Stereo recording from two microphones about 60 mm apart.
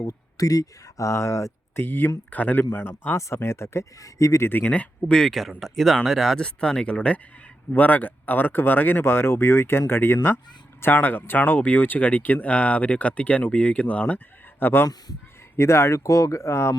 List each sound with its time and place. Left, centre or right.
0.0 s speech: left
1.7 s speech: left
3.2 s speech: left
4.0 s speech: left
4.6 s speech: left
5.3 s speech: centre
6.4 s speech: centre
14.6 s speech: left
15.5 s speech: left